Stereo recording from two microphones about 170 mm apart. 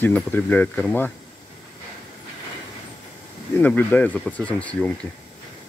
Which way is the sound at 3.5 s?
10° left (ahead or behind).